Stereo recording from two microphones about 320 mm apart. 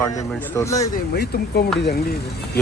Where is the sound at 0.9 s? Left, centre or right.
Left.